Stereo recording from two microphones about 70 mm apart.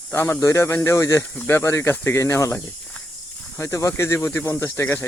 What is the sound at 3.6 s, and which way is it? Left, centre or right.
Speech, left.